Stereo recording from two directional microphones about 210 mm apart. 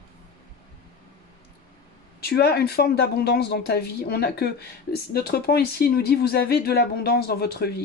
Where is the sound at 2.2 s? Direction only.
50° left (ahead or behind).